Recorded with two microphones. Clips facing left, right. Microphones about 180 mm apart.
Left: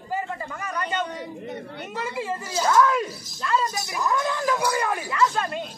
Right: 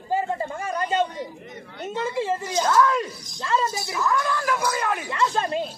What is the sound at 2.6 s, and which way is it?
Speech, 5° left (ahead or behind).